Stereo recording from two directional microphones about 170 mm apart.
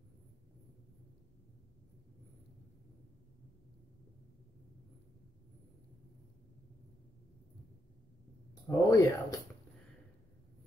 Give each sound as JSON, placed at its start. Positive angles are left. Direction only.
{"t": 8.6, "sound": "speech", "side_deg": 20}